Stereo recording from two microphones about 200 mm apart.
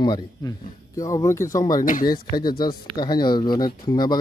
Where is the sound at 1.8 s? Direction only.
40° left (ahead or behind).